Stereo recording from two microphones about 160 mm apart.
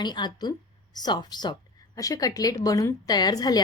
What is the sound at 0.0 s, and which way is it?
A woman's voice, 25° left (ahead or behind).